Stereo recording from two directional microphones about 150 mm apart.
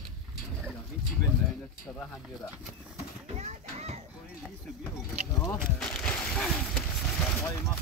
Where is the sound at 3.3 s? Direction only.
50° right (ahead or behind).